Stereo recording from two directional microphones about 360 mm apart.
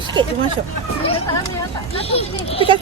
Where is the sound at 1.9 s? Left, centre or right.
Centre.